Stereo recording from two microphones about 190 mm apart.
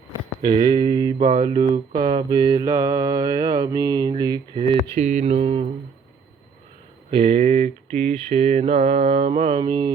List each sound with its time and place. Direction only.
0.4 s mantra: 20° right (ahead or behind)
4.9 s mantra: 40° right (ahead or behind)
7.1 s mantra: 30° right (ahead or behind)